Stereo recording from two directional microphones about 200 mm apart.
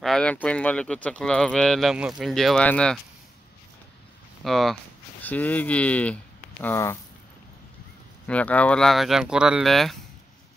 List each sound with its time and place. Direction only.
0.0 s speech: 5° left (ahead or behind)
4.5 s speech: centre (ahead or behind)
8.3 s speech: 5° left (ahead or behind)